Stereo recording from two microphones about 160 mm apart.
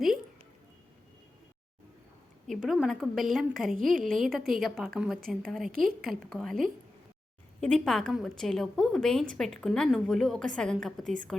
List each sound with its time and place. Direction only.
2.5 s a woman's voice: centre (ahead or behind)
3.9 s a woman's voice: 60° right (ahead or behind)
4.2 s a woman's voice: centre (ahead or behind)